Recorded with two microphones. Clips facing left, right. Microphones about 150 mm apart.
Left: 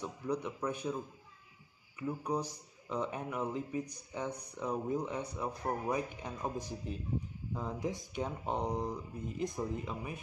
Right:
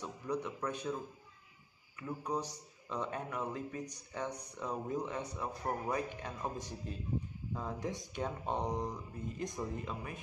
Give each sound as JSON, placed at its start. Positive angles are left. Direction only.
{"t": 0.0, "sound": "a man's voice", "side_deg": 15}
{"t": 2.0, "sound": "speech", "side_deg": 15}